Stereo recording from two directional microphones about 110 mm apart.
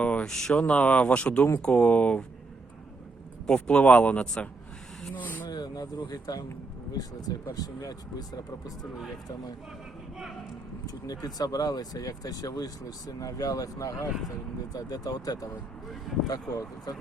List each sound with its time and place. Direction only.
0.0 s speech: 10° left (ahead or behind)
3.4 s speech: 10° left (ahead or behind)
5.5 s a sound: 40° left (ahead or behind)
6.9 s speech: 35° left (ahead or behind)
11.0 s speech: 35° left (ahead or behind)